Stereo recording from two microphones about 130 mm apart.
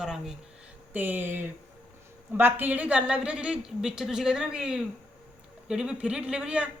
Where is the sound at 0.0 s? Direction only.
5° right (ahead or behind).